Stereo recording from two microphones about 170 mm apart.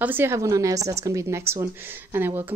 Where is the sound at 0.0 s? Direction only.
10° right (ahead or behind).